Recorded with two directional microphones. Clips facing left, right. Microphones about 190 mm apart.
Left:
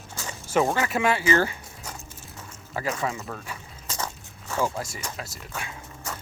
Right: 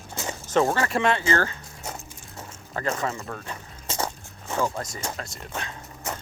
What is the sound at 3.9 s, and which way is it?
Biting, 25° right (ahead or behind).